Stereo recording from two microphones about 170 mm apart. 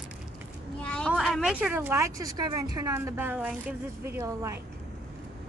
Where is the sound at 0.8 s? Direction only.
5° left (ahead or behind); by 4.6 s 15° right (ahead or behind).